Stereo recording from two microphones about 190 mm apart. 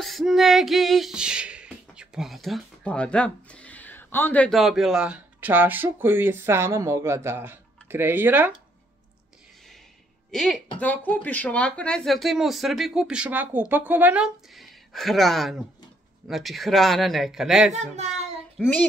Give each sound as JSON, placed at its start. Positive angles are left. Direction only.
{"t": 0.0, "sound": "music", "side_deg": 0}
{"t": 10.3, "sound": "speech", "side_deg": 0}
{"t": 17.7, "sound": "a child's voice", "side_deg": -35}
{"t": 18.6, "sound": "child singing", "side_deg": 10}